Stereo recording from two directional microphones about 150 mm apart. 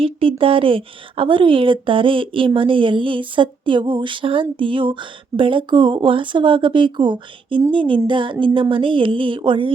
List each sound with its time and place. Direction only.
0.0 s speech: 35° right (ahead or behind)